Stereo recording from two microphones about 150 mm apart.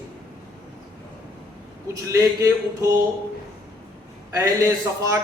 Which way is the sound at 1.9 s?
20° right (ahead or behind).